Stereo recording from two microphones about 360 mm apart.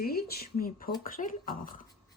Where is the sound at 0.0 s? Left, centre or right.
Left.